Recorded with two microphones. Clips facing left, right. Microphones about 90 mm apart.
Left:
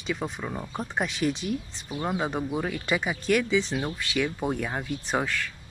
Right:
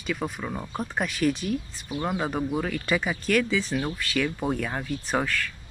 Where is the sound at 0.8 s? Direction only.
20° left (ahead or behind).